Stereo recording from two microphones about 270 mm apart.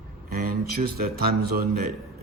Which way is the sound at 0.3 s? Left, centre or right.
Right.